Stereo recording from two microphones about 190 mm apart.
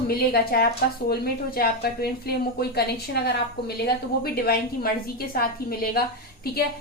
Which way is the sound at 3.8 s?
50° left (ahead or behind).